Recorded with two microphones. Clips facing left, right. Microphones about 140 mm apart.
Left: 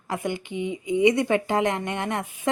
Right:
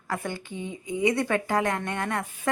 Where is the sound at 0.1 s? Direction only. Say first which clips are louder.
Left 4 dB; 20° left (ahead or behind).